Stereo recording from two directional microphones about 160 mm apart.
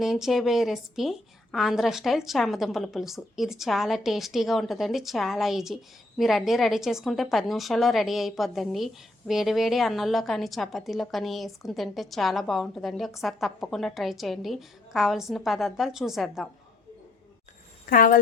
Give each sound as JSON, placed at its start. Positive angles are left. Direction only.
{"t": 0.0, "sound": "a woman's voice", "side_deg": 0}
{"t": 17.8, "sound": "speech", "side_deg": 60}